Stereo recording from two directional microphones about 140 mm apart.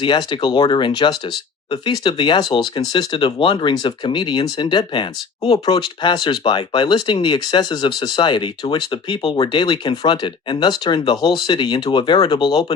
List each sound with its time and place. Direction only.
0.0 s speech: 35° left (ahead or behind)